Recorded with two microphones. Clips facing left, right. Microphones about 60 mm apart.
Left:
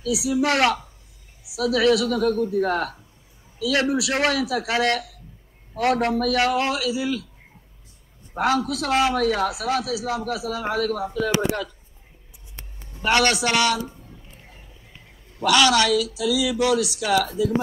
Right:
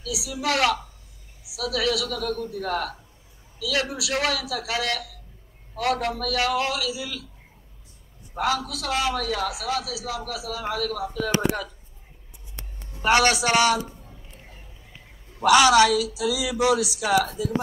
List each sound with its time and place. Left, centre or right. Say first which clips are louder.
0.0 s a man's voice: left 7 dB; left
8.4 s a man's voice: left 4 dB; left
11.1 s speech: left 3 dB; centre
13.1 s a man's voice: even; centre
15.4 s speech: right 2 dB; centre